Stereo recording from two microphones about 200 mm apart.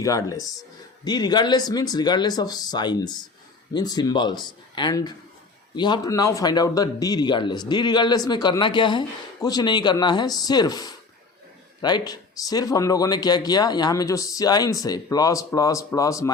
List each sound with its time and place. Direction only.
0.0 s speech: 15° left (ahead or behind)